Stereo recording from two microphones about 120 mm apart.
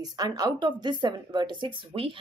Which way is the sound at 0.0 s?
35° right (ahead or behind).